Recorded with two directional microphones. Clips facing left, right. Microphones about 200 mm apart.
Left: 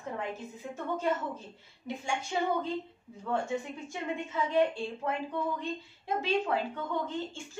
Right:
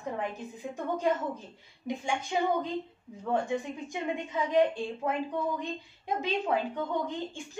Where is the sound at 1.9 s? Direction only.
15° right (ahead or behind).